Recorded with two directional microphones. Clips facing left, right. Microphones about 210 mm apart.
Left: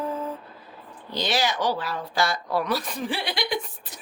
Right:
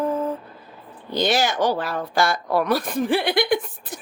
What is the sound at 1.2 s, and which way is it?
Speech, 50° right (ahead or behind).